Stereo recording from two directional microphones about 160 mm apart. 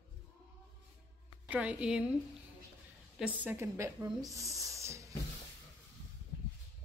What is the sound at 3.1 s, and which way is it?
A woman's voice, 10° right (ahead or behind).